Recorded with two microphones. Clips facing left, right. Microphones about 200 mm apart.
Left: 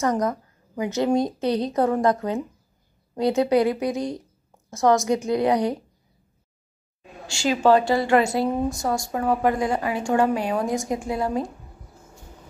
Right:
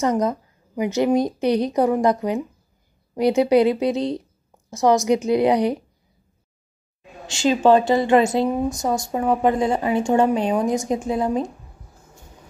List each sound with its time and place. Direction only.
0.0 s a woman's voice: 20° right (ahead or behind)
7.2 s speech: 20° right (ahead or behind)